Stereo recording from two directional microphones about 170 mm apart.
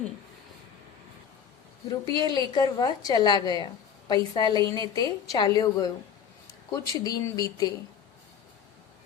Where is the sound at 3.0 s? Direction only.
25° left (ahead or behind).